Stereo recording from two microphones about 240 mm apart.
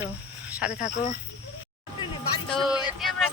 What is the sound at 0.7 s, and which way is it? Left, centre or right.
Speech, left.